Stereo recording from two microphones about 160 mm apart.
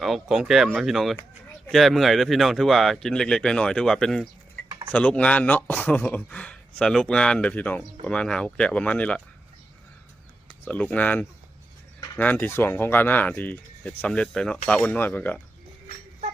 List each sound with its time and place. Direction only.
0.0 s speech: centre (ahead or behind)
10.7 s speech: 10° left (ahead or behind)